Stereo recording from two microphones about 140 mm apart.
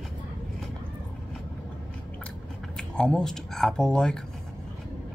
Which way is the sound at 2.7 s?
5° left (ahead or behind).